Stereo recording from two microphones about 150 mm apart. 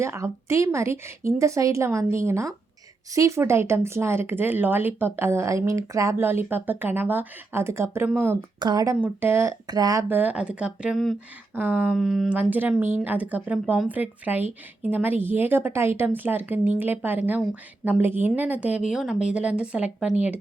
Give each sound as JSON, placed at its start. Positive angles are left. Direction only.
{"t": 0.0, "sound": "a woman's voice", "side_deg": -20}
{"t": 8.5, "sound": "a woman's voice", "side_deg": -25}
{"t": 9.0, "sound": "speech", "side_deg": -10}
{"t": 11.5, "sound": "speech", "side_deg": -10}